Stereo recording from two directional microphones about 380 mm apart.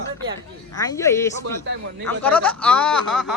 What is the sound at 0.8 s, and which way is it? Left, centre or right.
Speech, centre.